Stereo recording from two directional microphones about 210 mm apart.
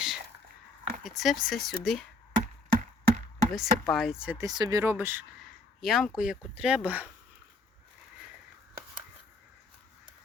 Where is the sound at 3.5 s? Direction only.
Centre (ahead or behind).